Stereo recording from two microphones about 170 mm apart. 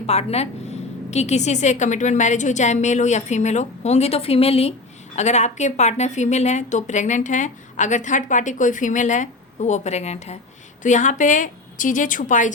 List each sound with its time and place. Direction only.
0.0 s a woman's voice: 40° left (ahead or behind)